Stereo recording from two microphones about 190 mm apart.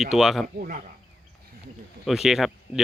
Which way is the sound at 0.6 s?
45° right (ahead or behind).